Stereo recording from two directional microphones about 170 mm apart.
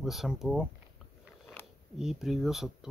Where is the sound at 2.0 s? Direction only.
Centre (ahead or behind).